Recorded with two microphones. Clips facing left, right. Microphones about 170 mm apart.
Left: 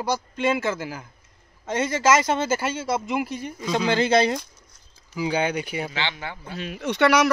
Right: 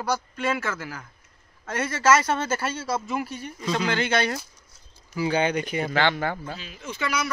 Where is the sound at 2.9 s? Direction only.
20° left (ahead or behind).